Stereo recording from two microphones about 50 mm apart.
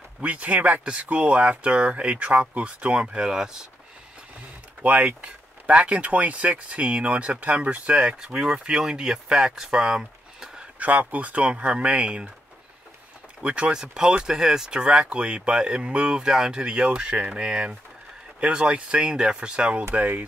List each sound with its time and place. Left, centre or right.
0.2 s speech: right; by 3.6 s centre
4.8 s speech: right; by 10.6 s centre
10.8 s speech: right
13.4 s speech: right
20.0 s speech: right